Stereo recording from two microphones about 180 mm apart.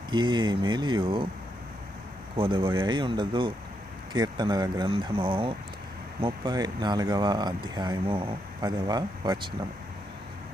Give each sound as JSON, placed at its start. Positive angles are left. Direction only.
{"t": 0.1, "sound": "speech", "side_deg": -25}
{"t": 2.3, "sound": "speech", "side_deg": -30}